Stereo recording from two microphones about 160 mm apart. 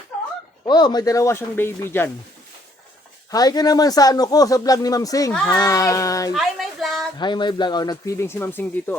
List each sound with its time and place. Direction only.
0.6 s speech: 25° left (ahead or behind)
3.3 s speech: 25° left (ahead or behind)
6.3 s a sound: centre (ahead or behind)
7.2 s speech: 30° left (ahead or behind); by 9.0 s 10° left (ahead or behind)